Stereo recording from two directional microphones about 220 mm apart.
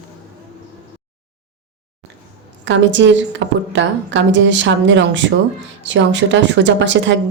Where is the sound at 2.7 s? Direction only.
55° right (ahead or behind).